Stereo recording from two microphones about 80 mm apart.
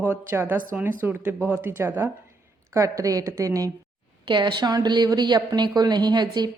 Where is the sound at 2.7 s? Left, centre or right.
Right.